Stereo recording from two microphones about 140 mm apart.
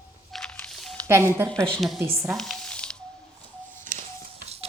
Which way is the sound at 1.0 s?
15° right (ahead or behind).